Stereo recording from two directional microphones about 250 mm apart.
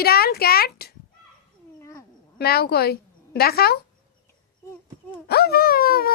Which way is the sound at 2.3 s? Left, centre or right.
Left.